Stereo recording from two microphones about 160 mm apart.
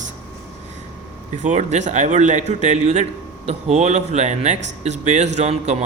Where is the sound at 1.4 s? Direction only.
50° right (ahead or behind).